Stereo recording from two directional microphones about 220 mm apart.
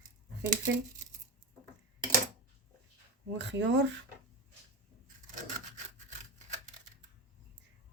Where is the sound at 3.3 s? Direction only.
55° right (ahead or behind).